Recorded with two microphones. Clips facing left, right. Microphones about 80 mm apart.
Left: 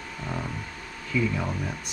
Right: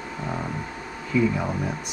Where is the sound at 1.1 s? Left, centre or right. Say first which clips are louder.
Right 4 dB; centre.